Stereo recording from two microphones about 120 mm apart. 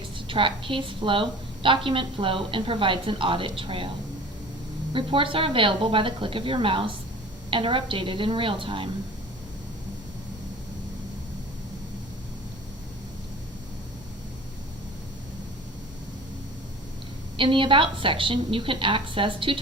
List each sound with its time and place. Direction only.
0.3 s a woman's voice: 45° right (ahead or behind)
4.9 s a woman's voice: 45° right (ahead or behind)
17.3 s a woman's voice: 45° right (ahead or behind)